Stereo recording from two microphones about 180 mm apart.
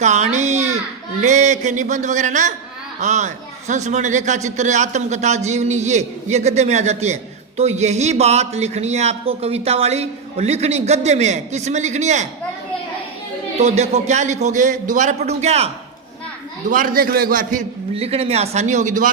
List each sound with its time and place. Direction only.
0.0 s a child's voice: 40° right (ahead or behind)
13.6 s a man's voice: 35° right (ahead or behind)
16.6 s speech: 50° right (ahead or behind)
17.9 s a man's voice: 35° right (ahead or behind)